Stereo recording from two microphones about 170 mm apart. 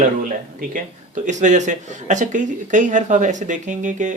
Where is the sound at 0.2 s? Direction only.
55° right (ahead or behind).